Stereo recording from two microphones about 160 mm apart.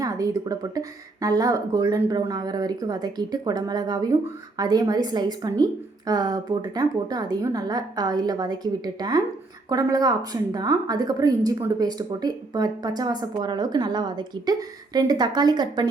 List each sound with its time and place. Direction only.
0.0 s a woman's voice: 20° right (ahead or behind)